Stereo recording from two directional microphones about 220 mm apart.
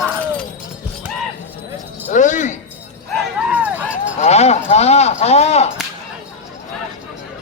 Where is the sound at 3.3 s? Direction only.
5° right (ahead or behind).